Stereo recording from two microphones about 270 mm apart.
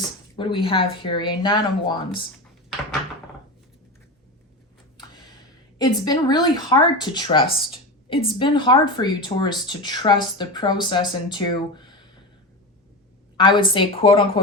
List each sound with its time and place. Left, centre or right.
0.3 s speech: centre
5.8 s speech: centre
13.3 s speech: centre